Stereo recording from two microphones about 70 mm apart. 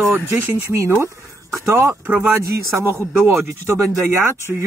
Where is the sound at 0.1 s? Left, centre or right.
Right.